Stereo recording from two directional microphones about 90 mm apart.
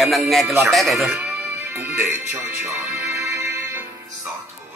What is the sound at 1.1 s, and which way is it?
Speech, 20° right (ahead or behind).